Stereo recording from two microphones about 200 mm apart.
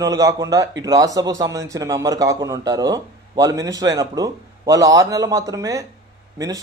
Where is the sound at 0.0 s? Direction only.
20° right (ahead or behind).